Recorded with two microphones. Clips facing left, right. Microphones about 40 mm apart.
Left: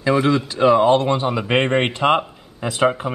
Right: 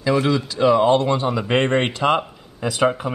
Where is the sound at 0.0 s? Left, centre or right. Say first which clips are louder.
Left 2 dB; left.